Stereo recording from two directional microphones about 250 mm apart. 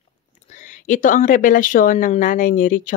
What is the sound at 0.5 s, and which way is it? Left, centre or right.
Speech, left.